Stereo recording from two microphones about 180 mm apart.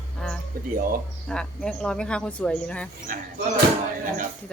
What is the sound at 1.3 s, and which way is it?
Speech, 5° left (ahead or behind).